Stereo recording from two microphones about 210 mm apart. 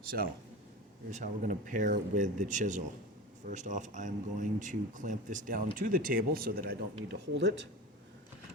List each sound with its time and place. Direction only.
1.1 s speech: 40° right (ahead or behind); by 7.5 s 55° right (ahead or behind)